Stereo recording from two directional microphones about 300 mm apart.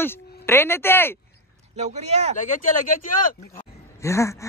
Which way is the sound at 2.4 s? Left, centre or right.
Left.